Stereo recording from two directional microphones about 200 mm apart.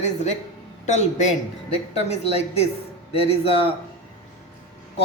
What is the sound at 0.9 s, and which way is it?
Speech, 35° left (ahead or behind).